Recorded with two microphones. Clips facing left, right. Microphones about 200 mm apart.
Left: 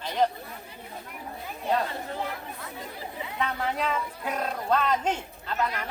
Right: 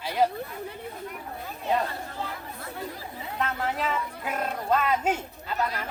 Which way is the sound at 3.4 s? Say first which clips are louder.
Even; centre (ahead or behind).